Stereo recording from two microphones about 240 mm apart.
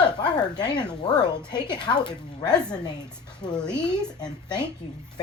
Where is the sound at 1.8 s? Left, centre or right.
Centre.